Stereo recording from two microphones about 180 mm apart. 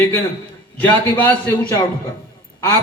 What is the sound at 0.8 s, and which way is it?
A man's voice, 10° left (ahead or behind).